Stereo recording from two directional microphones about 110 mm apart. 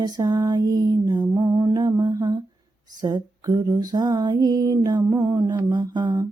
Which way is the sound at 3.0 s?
35° right (ahead or behind).